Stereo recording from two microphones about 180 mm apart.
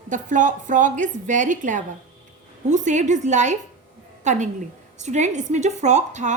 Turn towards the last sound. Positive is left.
turn(degrees=-40)  # may be behind; listen again after turning